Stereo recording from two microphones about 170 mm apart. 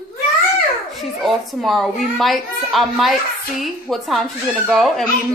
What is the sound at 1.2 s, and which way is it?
A child's voice, centre (ahead or behind).